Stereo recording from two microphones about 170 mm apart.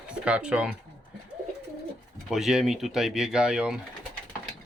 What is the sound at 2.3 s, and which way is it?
Speech, centre (ahead or behind).